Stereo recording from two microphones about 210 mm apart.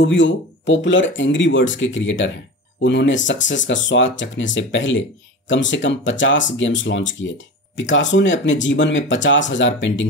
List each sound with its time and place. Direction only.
0.0 s speech: 60° left (ahead or behind)